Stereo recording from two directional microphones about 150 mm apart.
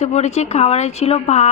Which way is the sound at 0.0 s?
50° left (ahead or behind).